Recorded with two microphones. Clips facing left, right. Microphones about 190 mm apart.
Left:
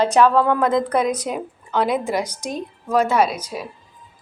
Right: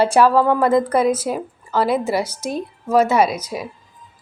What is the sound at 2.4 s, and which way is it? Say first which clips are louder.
Speech: right 3 dB; 5° right (ahead or behind).